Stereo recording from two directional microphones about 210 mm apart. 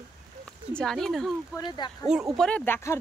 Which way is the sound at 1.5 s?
20° left (ahead or behind).